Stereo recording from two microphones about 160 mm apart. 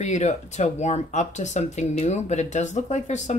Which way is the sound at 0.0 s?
45° left (ahead or behind).